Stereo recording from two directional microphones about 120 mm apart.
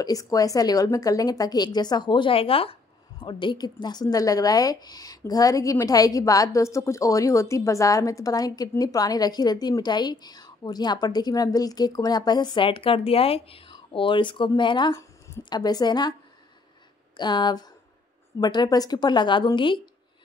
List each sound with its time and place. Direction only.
0.0 s a woman's voice: 30° left (ahead or behind)
15.0 s speech: 25° left (ahead or behind)
17.2 s a woman's voice: 40° left (ahead or behind)